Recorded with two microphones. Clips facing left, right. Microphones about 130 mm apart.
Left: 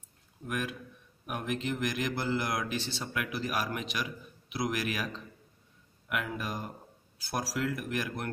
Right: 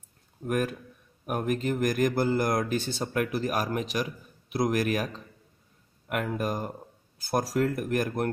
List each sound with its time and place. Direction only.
0.5 s speech: 45° right (ahead or behind)